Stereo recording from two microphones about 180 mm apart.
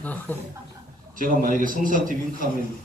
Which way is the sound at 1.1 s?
50° right (ahead or behind).